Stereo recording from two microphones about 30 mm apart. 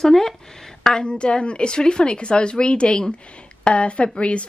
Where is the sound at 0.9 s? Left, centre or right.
Left.